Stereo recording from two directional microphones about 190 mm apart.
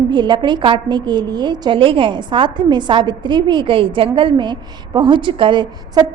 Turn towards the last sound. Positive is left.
turn(degrees=-25)  # may be behind; listen again after turning